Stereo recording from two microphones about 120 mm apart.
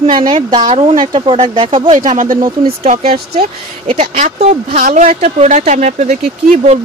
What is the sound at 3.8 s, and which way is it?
Speech, 70° right (ahead or behind).